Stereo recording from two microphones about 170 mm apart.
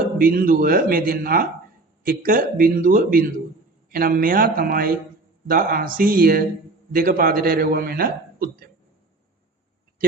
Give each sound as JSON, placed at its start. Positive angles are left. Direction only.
{"t": 0.2, "sound": "a man's voice", "side_deg": -55}